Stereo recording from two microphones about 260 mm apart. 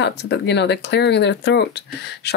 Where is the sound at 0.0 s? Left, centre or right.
Left.